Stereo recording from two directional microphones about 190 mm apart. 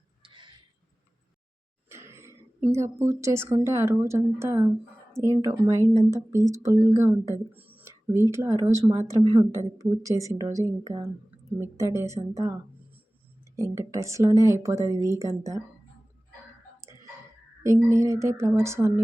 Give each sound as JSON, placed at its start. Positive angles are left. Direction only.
{"t": 0.2, "sound": "a sound", "side_deg": -25}
{"t": 1.9, "sound": "throat clearing", "side_deg": -15}
{"t": 3.0, "sound": "a woman's voice", "side_deg": -15}
{"t": 5.8, "sound": "speech", "side_deg": -40}
{"t": 6.1, "sound": "a woman's voice", "side_deg": -15}
{"t": 13.6, "sound": "a woman's voice", "side_deg": -15}
{"t": 17.6, "sound": "a woman's voice", "side_deg": -15}